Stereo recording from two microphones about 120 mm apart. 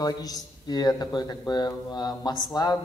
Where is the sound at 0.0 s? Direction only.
30° left (ahead or behind).